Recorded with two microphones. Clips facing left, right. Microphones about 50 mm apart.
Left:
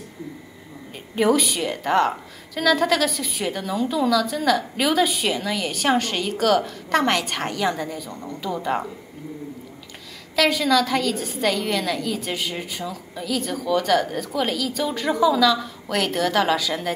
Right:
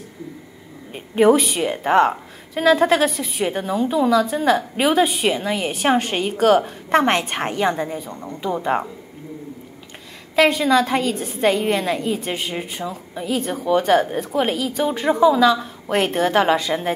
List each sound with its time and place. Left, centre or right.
0.9 s a woman's voice: right
10.3 s a woman's voice: right